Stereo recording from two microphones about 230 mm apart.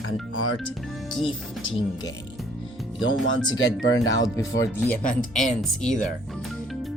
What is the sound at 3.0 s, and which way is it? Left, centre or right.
Speech, left.